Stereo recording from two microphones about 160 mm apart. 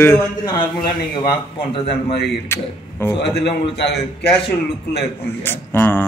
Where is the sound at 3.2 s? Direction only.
90° left.